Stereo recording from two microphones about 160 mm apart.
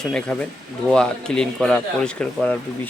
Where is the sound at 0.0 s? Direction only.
5° left (ahead or behind).